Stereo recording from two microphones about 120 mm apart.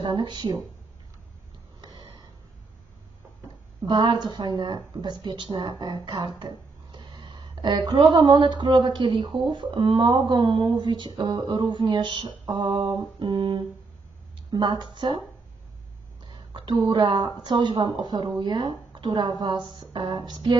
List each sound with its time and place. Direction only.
0.0 s speech: 40° right (ahead or behind)
1.8 s a sound: 35° right (ahead or behind)
3.8 s speech: 40° right (ahead or behind)
16.2 s speech: 45° right (ahead or behind)